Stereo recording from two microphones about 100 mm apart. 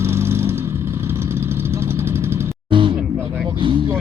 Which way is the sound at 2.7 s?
55° right (ahead or behind).